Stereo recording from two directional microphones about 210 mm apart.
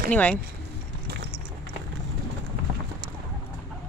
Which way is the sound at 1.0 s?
55° right (ahead or behind).